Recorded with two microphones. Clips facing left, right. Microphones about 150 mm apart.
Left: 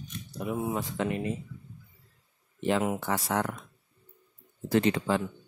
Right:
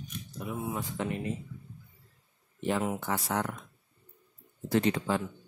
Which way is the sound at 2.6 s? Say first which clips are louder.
Left 3 dB; 90° left.